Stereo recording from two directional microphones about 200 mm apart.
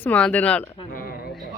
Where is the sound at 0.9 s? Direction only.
45° left (ahead or behind).